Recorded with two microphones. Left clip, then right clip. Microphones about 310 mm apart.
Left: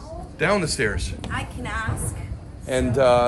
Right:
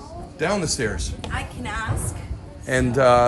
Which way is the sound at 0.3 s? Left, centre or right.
Centre.